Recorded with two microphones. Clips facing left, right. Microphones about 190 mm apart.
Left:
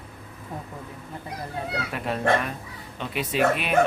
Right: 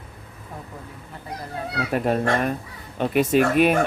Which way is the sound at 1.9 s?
45° right (ahead or behind).